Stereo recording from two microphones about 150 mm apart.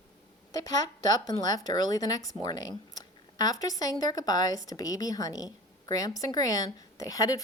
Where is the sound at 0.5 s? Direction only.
25° left (ahead or behind).